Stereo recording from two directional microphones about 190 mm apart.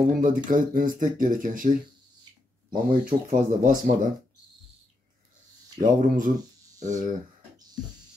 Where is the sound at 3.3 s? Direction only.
45° right (ahead or behind).